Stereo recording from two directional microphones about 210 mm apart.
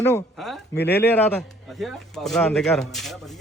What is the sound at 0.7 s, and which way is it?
Speech, 50° left (ahead or behind).